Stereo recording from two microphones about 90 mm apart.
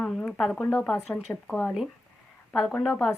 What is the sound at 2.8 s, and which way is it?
Speech, centre (ahead or behind).